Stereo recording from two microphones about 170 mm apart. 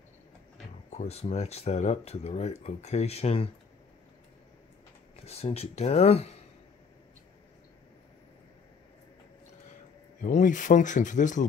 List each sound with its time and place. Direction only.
0.8 s speech: 40° left (ahead or behind)
5.2 s speech: 35° left (ahead or behind)
10.2 s speech: 50° left (ahead or behind)